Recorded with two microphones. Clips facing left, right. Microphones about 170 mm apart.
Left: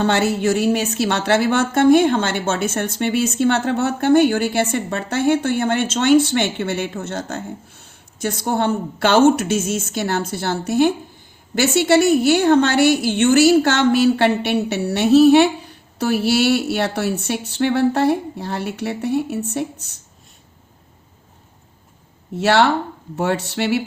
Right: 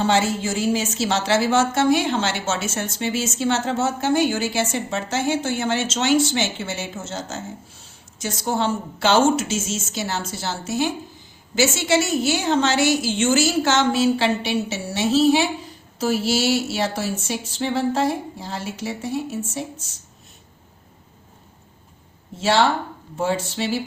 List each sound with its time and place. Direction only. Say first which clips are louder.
0.0 s a woman's voice: left 3 dB; 60° left (ahead or behind)
22.4 s a woman's voice: left 3 dB; 65° left (ahead or behind)